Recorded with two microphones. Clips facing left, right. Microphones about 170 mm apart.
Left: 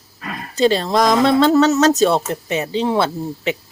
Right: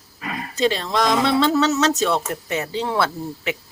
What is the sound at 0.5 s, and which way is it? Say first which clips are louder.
Speech: left 5 dB; 35° left (ahead or behind).